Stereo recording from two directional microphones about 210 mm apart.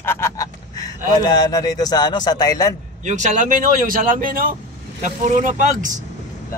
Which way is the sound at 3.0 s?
35° right (ahead or behind).